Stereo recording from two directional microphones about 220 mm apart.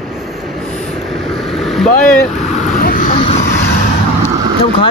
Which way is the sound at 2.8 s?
40° left (ahead or behind).